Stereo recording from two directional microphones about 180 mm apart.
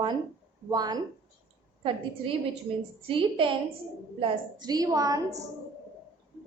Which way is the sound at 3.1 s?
30° right (ahead or behind).